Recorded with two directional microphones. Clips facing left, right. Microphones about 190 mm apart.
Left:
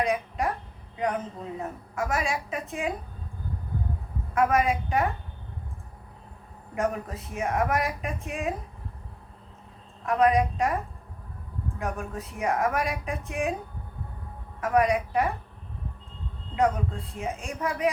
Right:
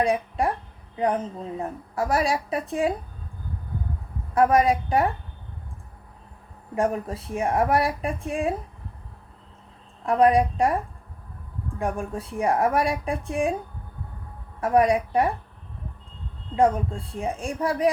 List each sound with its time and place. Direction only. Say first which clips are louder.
0.0 s a woman's voice: right 4 dB; 30° right (ahead or behind)
4.4 s a woman's voice: right 4 dB; 35° right (ahead or behind)
6.7 s a woman's voice: right 4 dB; 30° right (ahead or behind)
10.1 s a woman's voice: right 3 dB; 30° right (ahead or behind)
11.8 s a woman's voice: right 5 dB; 30° right (ahead or behind)
14.6 s a woman's voice: right 3 dB; 30° right (ahead or behind)
17.2 s a woman's voice: right 5 dB; 35° right (ahead or behind)